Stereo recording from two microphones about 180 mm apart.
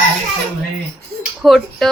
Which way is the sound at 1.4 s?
Centre (ahead or behind).